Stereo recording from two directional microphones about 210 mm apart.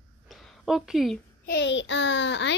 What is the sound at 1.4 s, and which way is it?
A child's voice, 55° left (ahead or behind).